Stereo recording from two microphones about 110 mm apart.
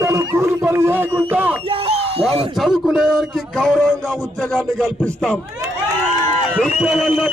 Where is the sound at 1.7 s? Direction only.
60° right (ahead or behind).